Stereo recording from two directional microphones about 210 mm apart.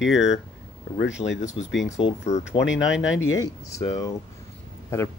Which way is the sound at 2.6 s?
60° left (ahead or behind).